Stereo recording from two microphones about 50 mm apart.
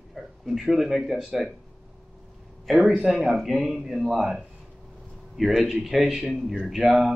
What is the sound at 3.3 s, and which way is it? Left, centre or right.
Speech, centre.